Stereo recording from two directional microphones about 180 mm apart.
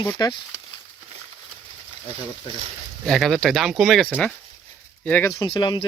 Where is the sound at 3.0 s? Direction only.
Centre (ahead or behind).